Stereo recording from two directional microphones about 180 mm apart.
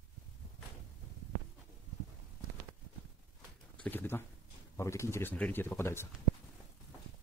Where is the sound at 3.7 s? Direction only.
10° left (ahead or behind).